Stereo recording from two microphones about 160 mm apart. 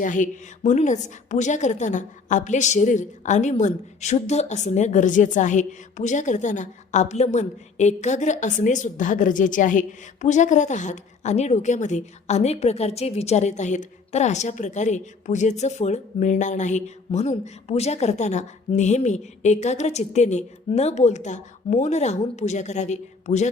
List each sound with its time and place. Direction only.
0.0 s a woman's voice: 55° left (ahead or behind)